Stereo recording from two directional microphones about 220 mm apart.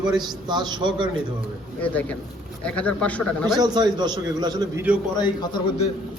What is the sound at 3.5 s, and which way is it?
A man's voice, 20° right (ahead or behind).